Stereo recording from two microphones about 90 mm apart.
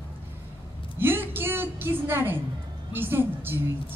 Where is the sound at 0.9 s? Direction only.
25° right (ahead or behind).